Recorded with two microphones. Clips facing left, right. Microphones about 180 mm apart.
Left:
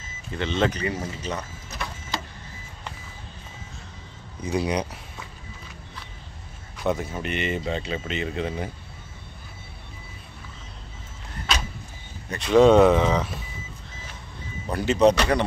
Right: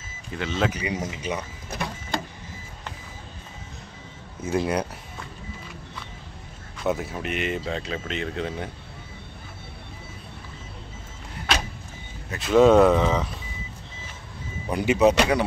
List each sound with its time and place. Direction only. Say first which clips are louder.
0.4 s speech: left 2 dB; 5° right (ahead or behind)
1.7 s printer: right 4 dB; 55° right (ahead or behind)
4.6 s speech: right 1 dB; centre (ahead or behind)
6.8 s speech: even; centre (ahead or behind)
12.3 s speech: left 1 dB; centre (ahead or behind)
14.7 s speech: even; 10° right (ahead or behind)